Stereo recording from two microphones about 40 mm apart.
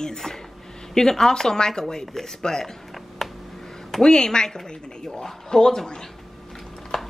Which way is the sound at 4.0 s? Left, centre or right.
Centre.